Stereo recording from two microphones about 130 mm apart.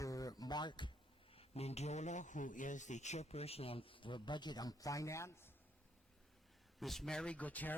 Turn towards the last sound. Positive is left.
turn(degrees=10)  # may be behind; listen again after turning